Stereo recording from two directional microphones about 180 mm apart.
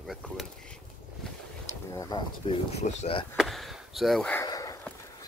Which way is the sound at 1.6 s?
20° left (ahead or behind).